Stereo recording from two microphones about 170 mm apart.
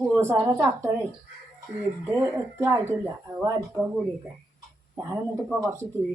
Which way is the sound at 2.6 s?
15° right (ahead or behind).